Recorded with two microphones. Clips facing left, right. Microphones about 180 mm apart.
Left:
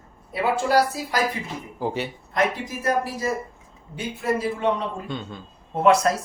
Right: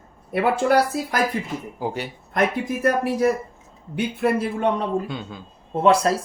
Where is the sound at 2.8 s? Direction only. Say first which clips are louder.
Right 4 dB; 65° right (ahead or behind).